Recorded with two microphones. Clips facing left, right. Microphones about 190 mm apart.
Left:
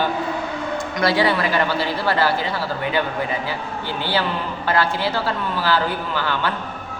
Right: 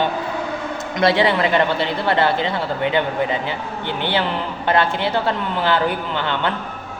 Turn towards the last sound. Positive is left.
turn(degrees=-25)  # may be behind; listen again after turning